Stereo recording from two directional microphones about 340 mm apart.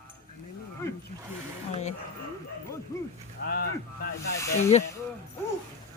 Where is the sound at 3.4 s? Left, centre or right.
Left.